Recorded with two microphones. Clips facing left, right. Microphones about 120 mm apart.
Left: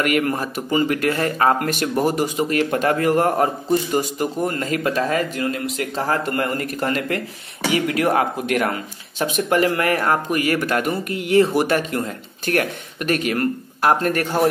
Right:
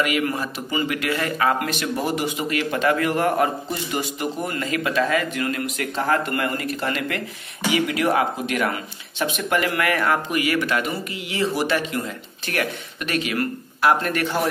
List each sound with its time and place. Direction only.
0.0 s speech: 50° left (ahead or behind)